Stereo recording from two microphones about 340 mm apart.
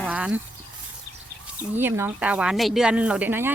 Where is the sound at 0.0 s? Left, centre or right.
Centre.